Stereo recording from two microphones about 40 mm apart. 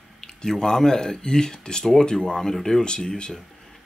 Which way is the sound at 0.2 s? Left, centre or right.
Centre.